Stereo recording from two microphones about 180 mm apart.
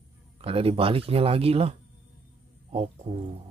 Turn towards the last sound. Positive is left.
turn(degrees=-35)  # may be behind; listen again after turning